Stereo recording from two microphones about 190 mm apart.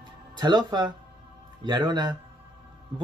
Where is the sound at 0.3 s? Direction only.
25° right (ahead or behind).